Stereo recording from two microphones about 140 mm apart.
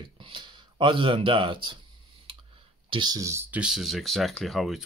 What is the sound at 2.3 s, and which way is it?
Clicking, 35° right (ahead or behind).